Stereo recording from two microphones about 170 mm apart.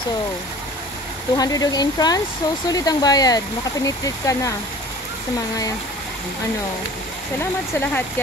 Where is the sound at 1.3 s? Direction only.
20° left (ahead or behind).